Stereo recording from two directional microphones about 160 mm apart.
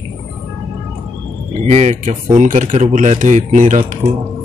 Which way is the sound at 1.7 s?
45° right (ahead or behind).